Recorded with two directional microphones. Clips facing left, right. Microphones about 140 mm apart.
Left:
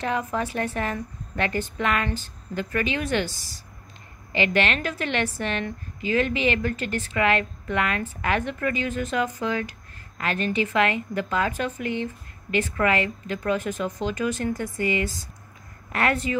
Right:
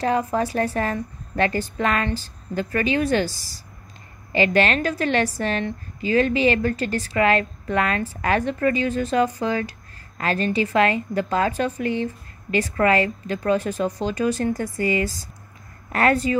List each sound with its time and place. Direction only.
0.0 s a woman's voice: 35° right (ahead or behind)